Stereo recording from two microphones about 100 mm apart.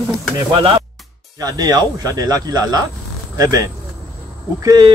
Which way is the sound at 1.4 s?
40° right (ahead or behind).